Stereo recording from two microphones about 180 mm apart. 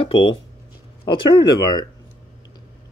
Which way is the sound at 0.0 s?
30° left (ahead or behind).